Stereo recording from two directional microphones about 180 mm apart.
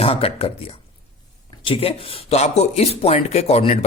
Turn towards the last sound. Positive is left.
turn(degrees=35)  # may be behind; listen again after turning